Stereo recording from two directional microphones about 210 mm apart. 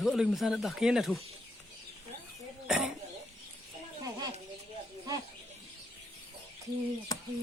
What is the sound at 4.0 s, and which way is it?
Children playing, 20° right (ahead or behind).